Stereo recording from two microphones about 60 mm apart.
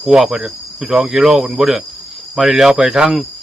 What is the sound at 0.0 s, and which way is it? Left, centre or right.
Speech, centre.